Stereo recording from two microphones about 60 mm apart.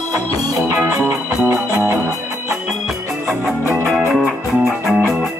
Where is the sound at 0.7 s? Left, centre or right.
Right.